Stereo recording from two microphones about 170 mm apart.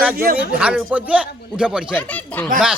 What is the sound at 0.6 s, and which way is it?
A man's voice, 5° right (ahead or behind).